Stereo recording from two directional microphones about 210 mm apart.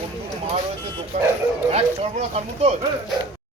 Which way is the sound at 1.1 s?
35° right (ahead or behind).